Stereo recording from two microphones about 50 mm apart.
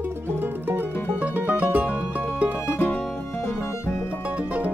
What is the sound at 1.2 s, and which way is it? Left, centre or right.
Music, right.